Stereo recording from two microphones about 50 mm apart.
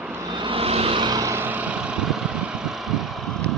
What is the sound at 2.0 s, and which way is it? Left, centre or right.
Vehicle, centre.